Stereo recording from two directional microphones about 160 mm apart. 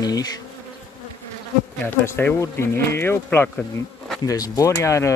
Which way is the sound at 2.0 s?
15° left (ahead or behind).